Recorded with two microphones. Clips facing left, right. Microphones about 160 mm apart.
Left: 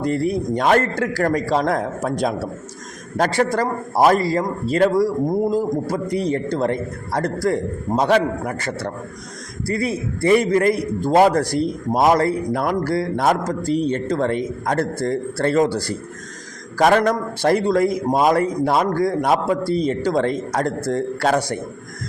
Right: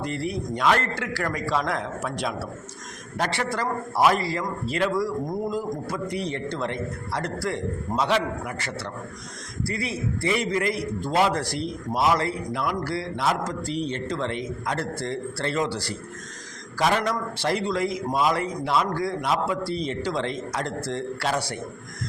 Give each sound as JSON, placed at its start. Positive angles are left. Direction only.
{"t": 0.0, "sound": "a man's voice", "side_deg": 45}